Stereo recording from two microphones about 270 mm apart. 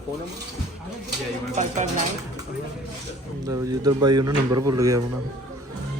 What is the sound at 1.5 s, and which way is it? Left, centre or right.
Speech, right.